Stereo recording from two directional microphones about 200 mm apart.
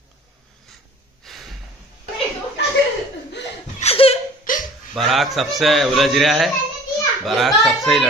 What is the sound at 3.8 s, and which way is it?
Laughter, 30° left (ahead or behind).